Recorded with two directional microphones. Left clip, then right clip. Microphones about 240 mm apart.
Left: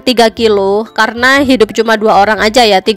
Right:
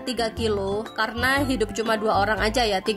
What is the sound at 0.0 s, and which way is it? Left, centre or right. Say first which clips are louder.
Speech: left 17 dB; left.